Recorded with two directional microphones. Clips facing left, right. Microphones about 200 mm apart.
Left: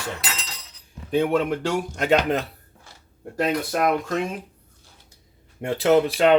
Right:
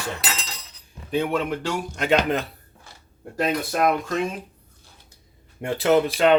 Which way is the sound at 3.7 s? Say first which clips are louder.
Even; 60° left (ahead or behind).